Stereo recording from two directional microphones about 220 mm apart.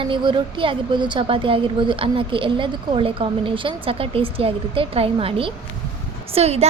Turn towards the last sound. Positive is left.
turn(degrees=-30)  # may be behind; listen again after turning